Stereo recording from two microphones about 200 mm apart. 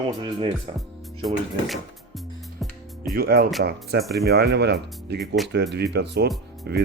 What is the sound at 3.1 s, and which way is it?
Speech, 50° right (ahead or behind).